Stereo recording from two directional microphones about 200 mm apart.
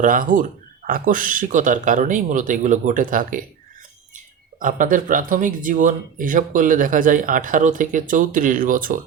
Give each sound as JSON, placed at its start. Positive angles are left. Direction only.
{"t": 0.0, "sound": "speech", "side_deg": -40}
{"t": 4.6, "sound": "speech", "side_deg": -40}